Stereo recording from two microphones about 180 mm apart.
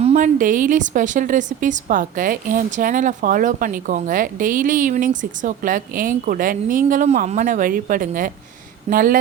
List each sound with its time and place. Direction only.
0.0 s a woman's voice: 40° right (ahead or behind)